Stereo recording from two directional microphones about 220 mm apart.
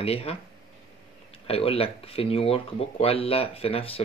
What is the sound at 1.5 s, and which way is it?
Speech, 25° left (ahead or behind).